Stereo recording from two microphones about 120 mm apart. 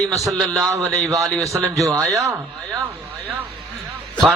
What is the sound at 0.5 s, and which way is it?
A man's voice, 25° right (ahead or behind).